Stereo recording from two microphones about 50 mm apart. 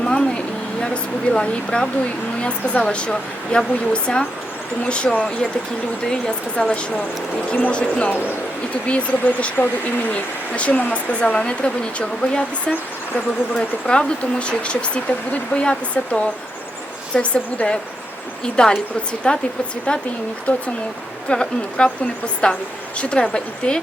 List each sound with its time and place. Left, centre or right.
0.0 s a sound: left
2.4 s speech: left
7.5 s speech: left